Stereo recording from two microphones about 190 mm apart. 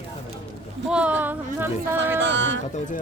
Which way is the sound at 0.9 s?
5° right (ahead or behind).